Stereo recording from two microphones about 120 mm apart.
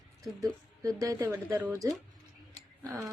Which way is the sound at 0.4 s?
30° right (ahead or behind).